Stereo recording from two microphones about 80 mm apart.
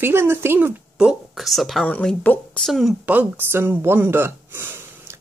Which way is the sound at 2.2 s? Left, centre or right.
Left.